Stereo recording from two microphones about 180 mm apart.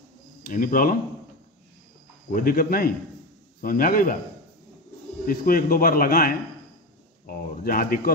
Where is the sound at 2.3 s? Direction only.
50° left (ahead or behind).